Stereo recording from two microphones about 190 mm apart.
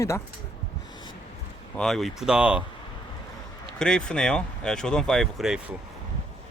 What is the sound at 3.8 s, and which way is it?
Speech, 5° left (ahead or behind).